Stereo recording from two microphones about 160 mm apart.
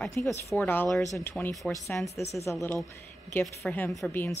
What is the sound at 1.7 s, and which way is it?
Speech, 10° left (ahead or behind).